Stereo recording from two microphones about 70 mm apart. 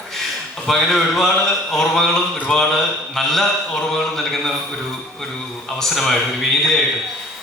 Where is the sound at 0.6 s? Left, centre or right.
Centre.